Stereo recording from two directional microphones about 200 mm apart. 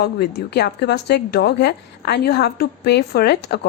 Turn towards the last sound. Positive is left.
turn(degrees=55)  # may be behind; listen again after turning